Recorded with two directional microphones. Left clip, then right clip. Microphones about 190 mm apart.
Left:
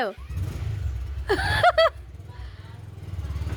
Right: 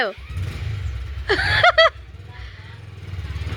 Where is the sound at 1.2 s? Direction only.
20° left (ahead or behind).